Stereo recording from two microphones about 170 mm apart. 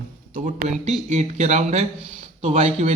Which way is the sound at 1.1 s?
40° right (ahead or behind).